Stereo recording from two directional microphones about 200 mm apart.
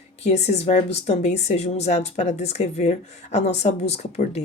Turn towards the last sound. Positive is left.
turn(degrees=35)  # may be behind; listen again after turning